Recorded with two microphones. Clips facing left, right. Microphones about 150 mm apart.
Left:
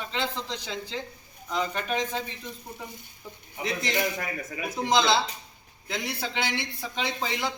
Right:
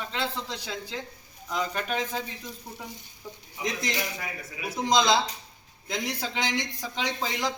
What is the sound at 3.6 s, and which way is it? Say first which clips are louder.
Speech: left 1 dB; 55° left (ahead or behind).